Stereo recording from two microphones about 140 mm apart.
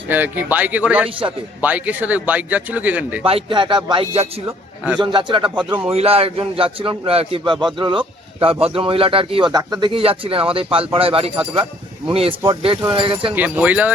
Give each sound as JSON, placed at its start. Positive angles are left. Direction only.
{"t": 0.1, "sound": "speech", "side_deg": -15}
{"t": 3.2, "sound": "a man's voice", "side_deg": -40}
{"t": 9.5, "sound": "a man's voice", "side_deg": -30}
{"t": 13.3, "sound": "speech", "side_deg": -10}